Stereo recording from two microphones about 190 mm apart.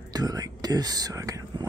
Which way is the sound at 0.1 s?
20° right (ahead or behind).